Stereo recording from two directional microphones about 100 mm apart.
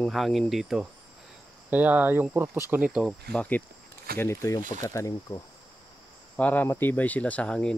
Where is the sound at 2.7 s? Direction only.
10° right (ahead or behind).